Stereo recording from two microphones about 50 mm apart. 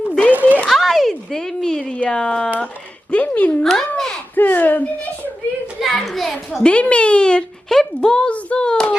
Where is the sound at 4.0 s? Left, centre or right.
Centre.